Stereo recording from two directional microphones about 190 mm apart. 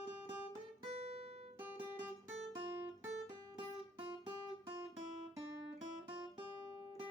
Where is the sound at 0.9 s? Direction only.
35° right (ahead or behind).